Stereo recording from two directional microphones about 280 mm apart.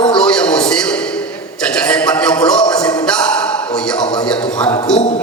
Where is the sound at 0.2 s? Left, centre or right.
Centre.